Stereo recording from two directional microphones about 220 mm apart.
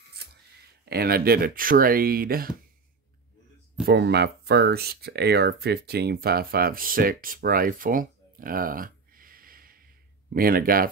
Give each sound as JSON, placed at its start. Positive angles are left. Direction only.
{"t": 0.2, "sound": "a sound", "side_deg": -45}
{"t": 0.8, "sound": "speech", "side_deg": -45}
{"t": 3.8, "sound": "speech", "side_deg": -45}